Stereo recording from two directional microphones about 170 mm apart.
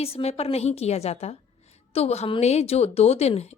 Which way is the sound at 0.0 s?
35° left (ahead or behind).